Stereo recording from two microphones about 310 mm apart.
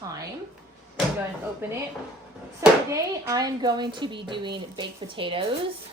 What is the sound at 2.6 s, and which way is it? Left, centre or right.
A woman's voice, centre.